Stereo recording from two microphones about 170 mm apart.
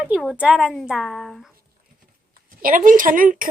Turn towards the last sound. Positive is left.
turn(degrees=-55)  # may be behind; listen again after turning